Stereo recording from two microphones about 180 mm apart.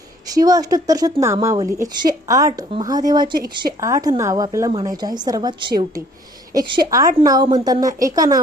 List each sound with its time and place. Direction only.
0.3 s a woman's voice: 20° right (ahead or behind)